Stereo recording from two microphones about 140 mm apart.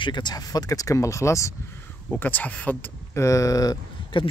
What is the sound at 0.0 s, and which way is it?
Speech, 30° left (ahead or behind).